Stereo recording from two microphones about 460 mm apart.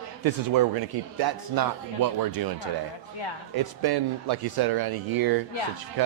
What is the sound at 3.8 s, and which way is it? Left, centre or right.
Speech, right.